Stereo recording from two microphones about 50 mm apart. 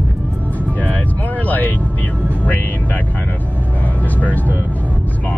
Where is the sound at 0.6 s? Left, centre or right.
Left.